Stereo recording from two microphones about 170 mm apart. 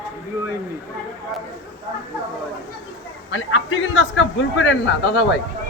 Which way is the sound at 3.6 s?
90° left.